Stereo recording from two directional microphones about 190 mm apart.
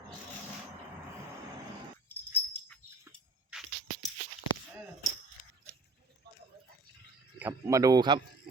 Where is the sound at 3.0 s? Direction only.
Centre (ahead or behind).